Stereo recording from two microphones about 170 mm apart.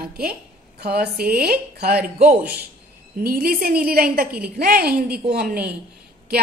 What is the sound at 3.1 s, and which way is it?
A woman's voice, 60° right (ahead or behind).